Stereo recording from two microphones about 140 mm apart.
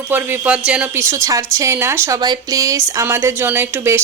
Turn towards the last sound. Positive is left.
turn(degrees=-15)  # may be behind; listen again after turning